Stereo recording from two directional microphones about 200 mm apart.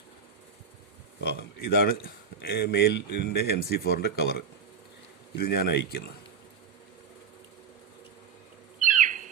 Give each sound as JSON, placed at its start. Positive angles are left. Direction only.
{"t": 1.2, "sound": "speech", "side_deg": 55}
{"t": 8.8, "sound": "bird", "side_deg": -40}